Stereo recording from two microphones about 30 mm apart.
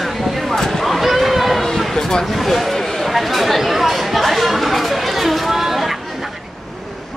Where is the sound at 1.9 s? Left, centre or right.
Centre.